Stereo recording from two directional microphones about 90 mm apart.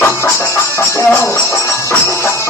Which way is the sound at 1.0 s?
20° left (ahead or behind).